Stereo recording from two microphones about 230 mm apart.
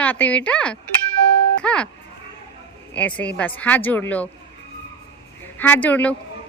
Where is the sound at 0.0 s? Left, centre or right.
Centre.